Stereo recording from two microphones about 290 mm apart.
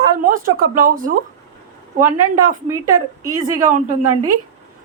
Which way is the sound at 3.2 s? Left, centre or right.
Centre.